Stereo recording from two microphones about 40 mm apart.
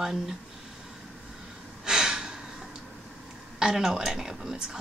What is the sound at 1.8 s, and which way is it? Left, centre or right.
Gasp, centre.